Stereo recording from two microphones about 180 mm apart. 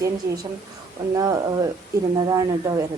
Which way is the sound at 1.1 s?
20° right (ahead or behind).